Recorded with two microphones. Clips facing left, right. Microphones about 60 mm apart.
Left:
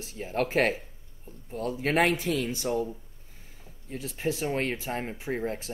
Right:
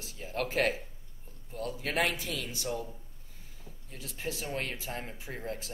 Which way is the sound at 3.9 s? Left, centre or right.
Left.